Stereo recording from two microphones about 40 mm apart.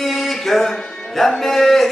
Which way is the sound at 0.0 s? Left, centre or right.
Centre.